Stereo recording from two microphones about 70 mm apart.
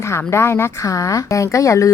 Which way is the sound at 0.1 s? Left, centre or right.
Left.